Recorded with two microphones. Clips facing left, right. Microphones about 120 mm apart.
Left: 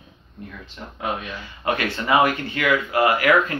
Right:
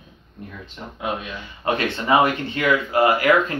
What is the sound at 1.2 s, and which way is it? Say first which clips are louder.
Speech: even; 25° right (ahead or behind).